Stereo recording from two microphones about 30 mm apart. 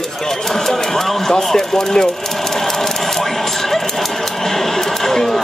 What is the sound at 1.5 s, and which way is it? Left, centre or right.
Speech, centre.